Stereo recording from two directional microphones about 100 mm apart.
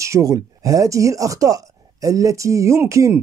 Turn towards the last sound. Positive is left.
turn(degrees=-30)  # may be behind; listen again after turning